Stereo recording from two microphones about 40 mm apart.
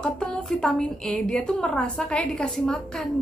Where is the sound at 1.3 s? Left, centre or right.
Left.